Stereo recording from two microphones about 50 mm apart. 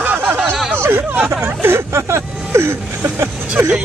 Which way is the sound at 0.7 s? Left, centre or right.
Right.